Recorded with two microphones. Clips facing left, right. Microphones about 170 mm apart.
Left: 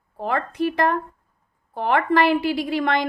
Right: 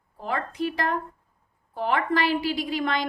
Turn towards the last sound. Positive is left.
turn(degrees=60)  # may be behind; listen again after turning